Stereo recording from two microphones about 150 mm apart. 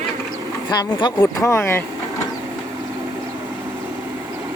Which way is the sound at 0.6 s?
30° left (ahead or behind).